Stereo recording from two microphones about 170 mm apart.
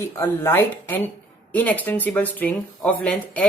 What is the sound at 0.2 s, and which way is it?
Speech, 10° left (ahead or behind).